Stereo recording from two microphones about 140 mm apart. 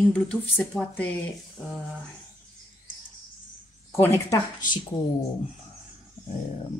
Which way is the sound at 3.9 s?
20° left (ahead or behind).